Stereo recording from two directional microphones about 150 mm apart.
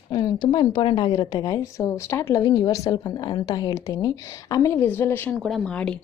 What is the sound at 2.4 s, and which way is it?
A woman's voice, 30° left (ahead or behind).